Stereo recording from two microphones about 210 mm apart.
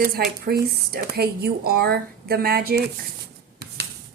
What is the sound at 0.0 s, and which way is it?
Speech, 50° right (ahead or behind).